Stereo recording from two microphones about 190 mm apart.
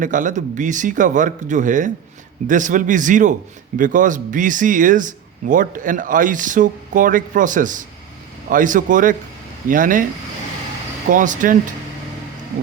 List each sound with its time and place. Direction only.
0.0 s speech: 40° right (ahead or behind)
11.1 s speech: 45° right (ahead or behind)